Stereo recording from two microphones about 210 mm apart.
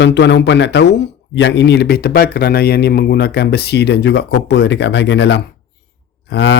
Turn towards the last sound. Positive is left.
turn(degrees=55)  # may be behind; listen again after turning